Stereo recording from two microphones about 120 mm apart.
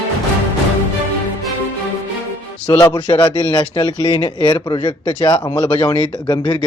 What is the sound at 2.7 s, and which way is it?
A man's voice, 30° left (ahead or behind).